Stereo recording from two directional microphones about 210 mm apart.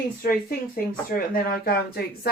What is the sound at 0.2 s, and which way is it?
Speech, 45° left (ahead or behind).